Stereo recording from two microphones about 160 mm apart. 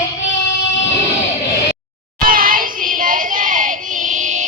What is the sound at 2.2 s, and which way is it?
Child singing, 60° right (ahead or behind).